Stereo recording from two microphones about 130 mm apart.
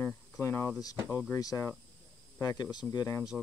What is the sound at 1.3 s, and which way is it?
Speech, 25° left (ahead or behind).